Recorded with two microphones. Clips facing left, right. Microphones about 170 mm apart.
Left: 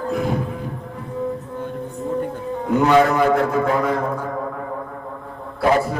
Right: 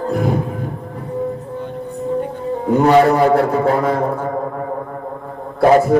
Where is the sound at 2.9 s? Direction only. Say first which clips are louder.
Right 4 dB; 35° right (ahead or behind).